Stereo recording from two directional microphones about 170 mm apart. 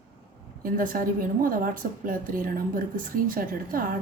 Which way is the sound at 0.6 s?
55° right (ahead or behind).